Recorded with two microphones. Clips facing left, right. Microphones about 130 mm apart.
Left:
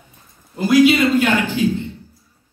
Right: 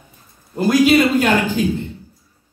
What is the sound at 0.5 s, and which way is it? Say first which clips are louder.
A man's voice: even; 40° right (ahead or behind).